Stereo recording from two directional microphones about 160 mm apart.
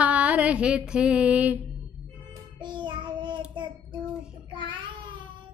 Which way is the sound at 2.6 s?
30° right (ahead or behind).